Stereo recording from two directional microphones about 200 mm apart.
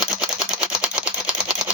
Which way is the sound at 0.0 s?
5° right (ahead or behind).